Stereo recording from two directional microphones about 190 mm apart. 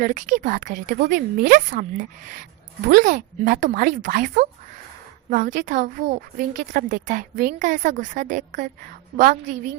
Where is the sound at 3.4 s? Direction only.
40° right (ahead or behind).